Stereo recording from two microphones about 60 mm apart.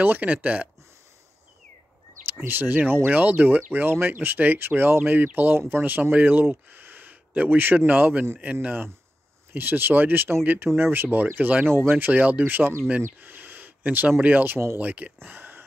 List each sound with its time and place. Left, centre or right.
0.0 s speech: right
2.4 s speech: right
13.0 s a sound: right
14.2 s speech: right
14.8 s speech: right
15.2 s a sound: right